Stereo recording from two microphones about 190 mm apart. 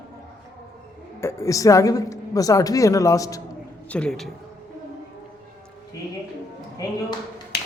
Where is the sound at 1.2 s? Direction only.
15° left (ahead or behind).